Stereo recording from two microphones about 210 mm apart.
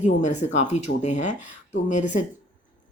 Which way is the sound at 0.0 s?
35° left (ahead or behind).